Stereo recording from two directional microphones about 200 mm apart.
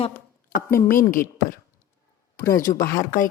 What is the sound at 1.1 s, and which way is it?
Speech, 45° left (ahead or behind).